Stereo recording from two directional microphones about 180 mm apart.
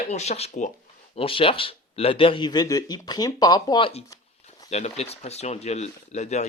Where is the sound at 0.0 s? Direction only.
40° left (ahead or behind).